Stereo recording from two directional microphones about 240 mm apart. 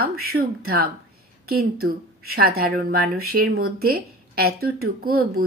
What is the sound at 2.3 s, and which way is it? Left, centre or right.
Speech, right.